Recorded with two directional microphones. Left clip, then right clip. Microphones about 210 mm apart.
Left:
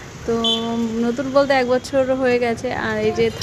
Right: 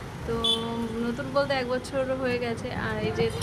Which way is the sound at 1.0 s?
30° left (ahead or behind).